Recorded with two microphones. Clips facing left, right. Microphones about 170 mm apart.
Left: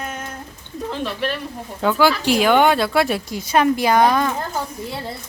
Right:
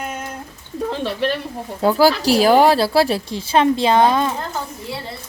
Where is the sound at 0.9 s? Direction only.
35° right (ahead or behind).